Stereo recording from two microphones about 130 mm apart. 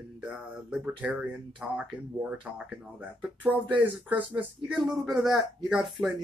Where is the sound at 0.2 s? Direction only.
5° right (ahead or behind).